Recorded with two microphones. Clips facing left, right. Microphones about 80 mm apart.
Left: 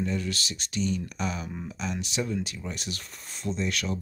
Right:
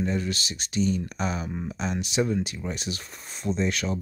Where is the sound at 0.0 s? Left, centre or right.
Right.